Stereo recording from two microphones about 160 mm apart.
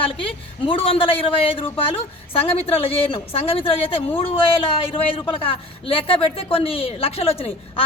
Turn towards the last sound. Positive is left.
turn(degrees=35)  # may be behind; listen again after turning